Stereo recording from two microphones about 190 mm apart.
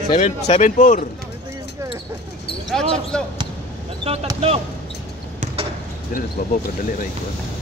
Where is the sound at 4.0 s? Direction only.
30° right (ahead or behind).